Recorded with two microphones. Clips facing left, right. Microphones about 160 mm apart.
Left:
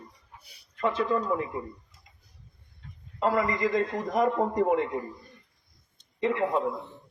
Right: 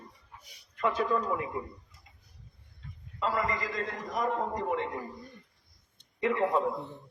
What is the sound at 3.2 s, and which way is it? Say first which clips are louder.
A man's voice: left 6 dB; 50° left (ahead or behind).